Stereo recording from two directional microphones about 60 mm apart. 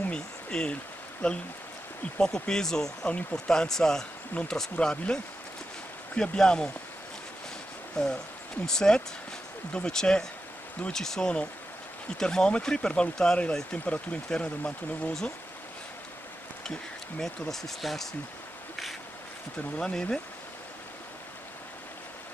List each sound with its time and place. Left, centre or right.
0.1 s a sound: centre
1.2 s speech: centre
3.1 s speech: left
3.3 s speech: centre
7.9 s speech: centre
17.2 s speech: centre
19.8 s speech: centre